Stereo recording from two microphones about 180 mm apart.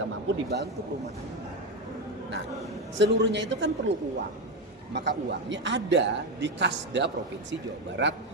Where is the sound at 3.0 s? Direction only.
75° right (ahead or behind).